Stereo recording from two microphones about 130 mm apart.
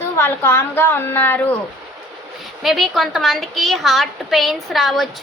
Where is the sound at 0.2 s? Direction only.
20° left (ahead or behind).